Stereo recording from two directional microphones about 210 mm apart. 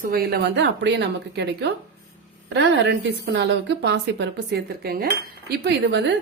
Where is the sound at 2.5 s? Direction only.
55° right (ahead or behind).